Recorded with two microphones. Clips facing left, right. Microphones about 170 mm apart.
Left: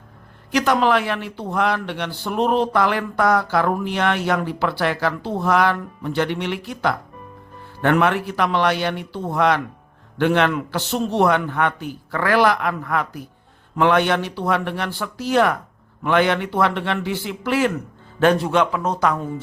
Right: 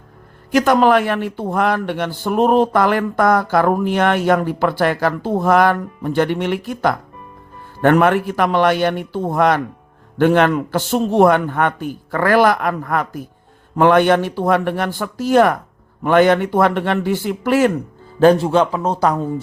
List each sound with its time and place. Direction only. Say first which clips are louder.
0.5 s a man's voice: right 5 dB; 45° right (ahead or behind)
18.2 s speech: right 5 dB; 30° right (ahead or behind)